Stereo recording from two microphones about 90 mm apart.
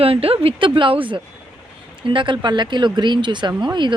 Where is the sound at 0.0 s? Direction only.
90° right.